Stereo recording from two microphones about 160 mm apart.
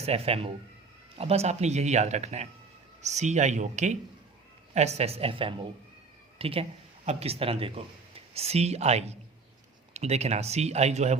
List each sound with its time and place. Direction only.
0.0 s a woman's voice: 40° right (ahead or behind)